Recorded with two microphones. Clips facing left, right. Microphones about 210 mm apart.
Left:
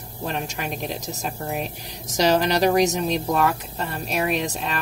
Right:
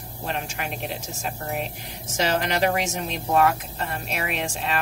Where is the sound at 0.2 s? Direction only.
40° left (ahead or behind).